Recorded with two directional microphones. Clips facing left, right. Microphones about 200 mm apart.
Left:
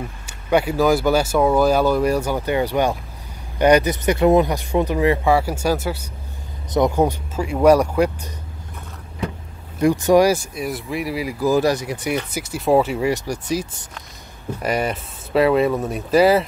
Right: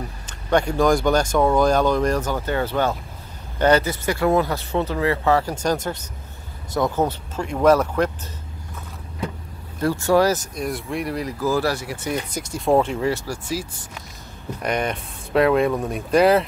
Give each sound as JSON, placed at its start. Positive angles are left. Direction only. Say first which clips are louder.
{"t": 0.3, "sound": "speech", "louder": "left 2 dB", "side_deg": 5}
{"t": 9.8, "sound": "speech", "louder": "left 4 dB", "side_deg": 15}
{"t": 12.3, "sound": "speech", "louder": "left 1 dB", "side_deg": 5}
{"t": 13.1, "sound": "speech", "louder": "left 4 dB", "side_deg": 20}
{"t": 14.6, "sound": "speech", "louder": "left 2 dB", "side_deg": 5}